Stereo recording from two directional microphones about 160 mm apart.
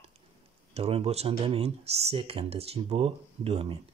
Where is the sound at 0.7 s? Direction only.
40° right (ahead or behind).